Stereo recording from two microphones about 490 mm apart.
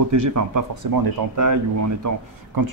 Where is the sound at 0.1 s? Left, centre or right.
Right.